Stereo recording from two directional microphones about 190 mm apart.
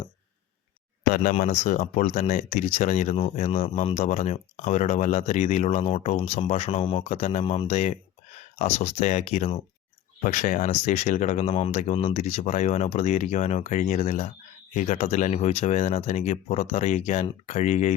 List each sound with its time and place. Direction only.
1.1 s speech: 40° left (ahead or behind)